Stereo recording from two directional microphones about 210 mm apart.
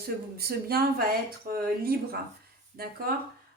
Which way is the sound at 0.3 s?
45° right (ahead or behind).